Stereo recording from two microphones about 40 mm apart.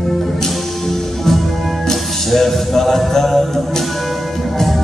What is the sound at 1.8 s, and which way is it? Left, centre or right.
Music, centre.